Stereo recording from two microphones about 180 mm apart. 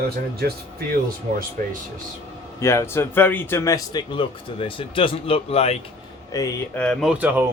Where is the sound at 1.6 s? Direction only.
50° right (ahead or behind).